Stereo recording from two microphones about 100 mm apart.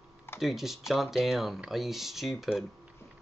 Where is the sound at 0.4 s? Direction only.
Centre (ahead or behind).